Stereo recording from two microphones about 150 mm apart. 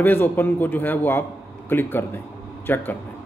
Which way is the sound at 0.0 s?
15° left (ahead or behind).